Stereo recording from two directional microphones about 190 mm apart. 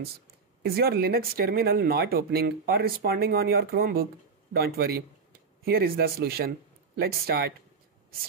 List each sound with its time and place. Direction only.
0.6 s speech: 55° right (ahead or behind)